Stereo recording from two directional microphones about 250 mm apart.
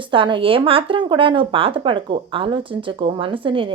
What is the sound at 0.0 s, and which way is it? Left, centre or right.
A woman's voice, centre.